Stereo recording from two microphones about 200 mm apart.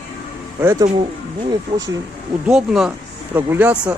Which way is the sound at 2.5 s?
Centre (ahead or behind).